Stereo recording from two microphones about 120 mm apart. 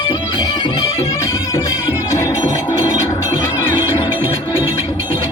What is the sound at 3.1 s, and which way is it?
Music, 20° left (ahead or behind).